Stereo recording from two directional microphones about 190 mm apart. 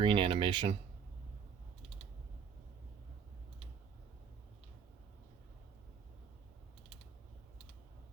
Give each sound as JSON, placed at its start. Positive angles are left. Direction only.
{"t": 0.0, "sound": "speech", "side_deg": -25}